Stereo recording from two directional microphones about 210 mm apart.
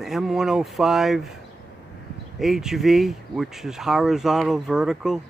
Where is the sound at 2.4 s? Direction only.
Centre (ahead or behind).